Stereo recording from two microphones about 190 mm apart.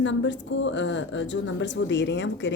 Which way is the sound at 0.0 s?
75° left (ahead or behind).